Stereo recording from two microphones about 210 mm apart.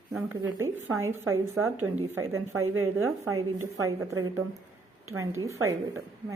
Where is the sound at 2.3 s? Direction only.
80° right.